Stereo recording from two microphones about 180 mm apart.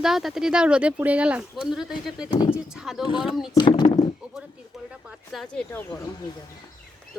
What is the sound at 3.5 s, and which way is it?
Speech, 25° left (ahead or behind).